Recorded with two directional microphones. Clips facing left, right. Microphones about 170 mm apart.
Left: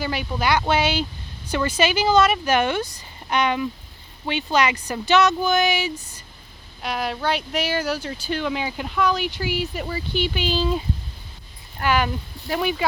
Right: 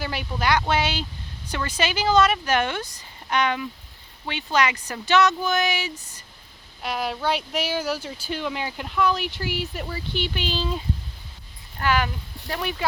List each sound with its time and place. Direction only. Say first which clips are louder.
0.0 s speech: left 2 dB; centre (ahead or behind)
0.7 s speech: left 3 dB; 20° left (ahead or behind)
6.8 s speech: left 1 dB; 5° right (ahead or behind)
11.8 s speech: left 2 dB; 15° left (ahead or behind)